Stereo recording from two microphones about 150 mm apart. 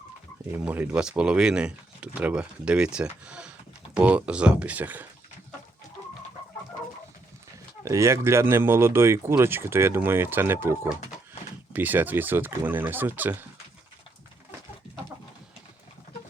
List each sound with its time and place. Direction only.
0.6 s speech: 5° right (ahead or behind)
7.9 s speech: 20° right (ahead or behind)